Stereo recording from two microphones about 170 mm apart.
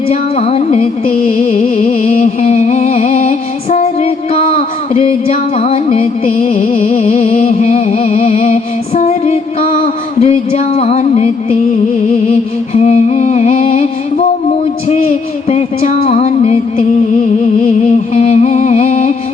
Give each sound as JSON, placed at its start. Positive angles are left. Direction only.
{"t": 0.1, "sound": "music", "side_deg": 40}
{"t": 1.0, "sound": "music", "side_deg": 50}
{"t": 6.5, "sound": "music", "side_deg": 50}
{"t": 6.8, "sound": "music", "side_deg": 35}
{"t": 12.7, "sound": "music", "side_deg": 40}
{"t": 15.4, "sound": "music", "side_deg": 40}
{"t": 17.6, "sound": "music", "side_deg": 45}